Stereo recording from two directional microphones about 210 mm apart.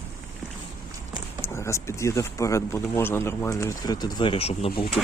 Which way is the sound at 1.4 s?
15° left (ahead or behind).